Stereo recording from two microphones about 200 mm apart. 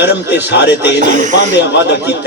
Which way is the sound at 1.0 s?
40° right (ahead or behind).